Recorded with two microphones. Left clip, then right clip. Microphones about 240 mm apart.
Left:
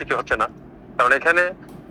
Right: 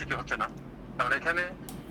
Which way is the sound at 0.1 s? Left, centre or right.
Left.